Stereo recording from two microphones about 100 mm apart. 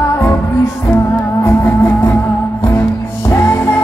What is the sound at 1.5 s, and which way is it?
Music, 20° left (ahead or behind).